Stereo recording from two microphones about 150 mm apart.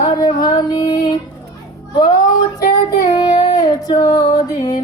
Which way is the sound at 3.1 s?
25° left (ahead or behind).